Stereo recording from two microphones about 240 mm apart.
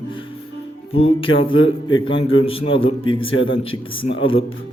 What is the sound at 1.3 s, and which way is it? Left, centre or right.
Music, left.